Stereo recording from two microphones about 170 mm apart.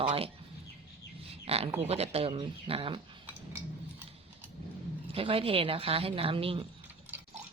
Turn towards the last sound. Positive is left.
turn(degrees=-35)  # may be behind; listen again after turning